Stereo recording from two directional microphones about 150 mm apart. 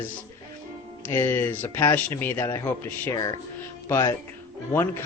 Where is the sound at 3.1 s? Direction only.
25° left (ahead or behind).